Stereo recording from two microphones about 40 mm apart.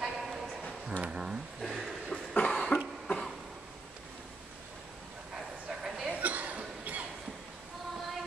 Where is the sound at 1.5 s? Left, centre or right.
Centre.